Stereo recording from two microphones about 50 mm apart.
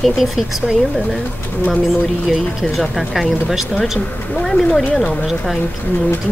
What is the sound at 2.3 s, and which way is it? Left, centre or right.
Speech, centre.